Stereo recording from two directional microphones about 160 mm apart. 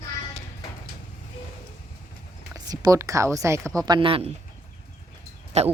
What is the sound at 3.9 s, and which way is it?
Speech, 35° right (ahead or behind).